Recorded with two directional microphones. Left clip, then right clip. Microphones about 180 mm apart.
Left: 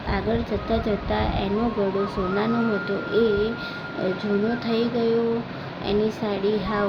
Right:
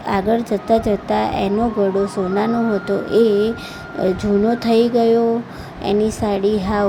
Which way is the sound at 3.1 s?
40° right (ahead or behind).